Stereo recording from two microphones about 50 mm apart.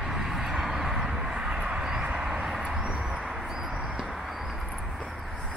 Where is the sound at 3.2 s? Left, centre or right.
Centre.